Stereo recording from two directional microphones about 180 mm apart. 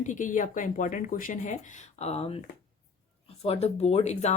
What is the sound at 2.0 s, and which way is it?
Speech, 35° left (ahead or behind).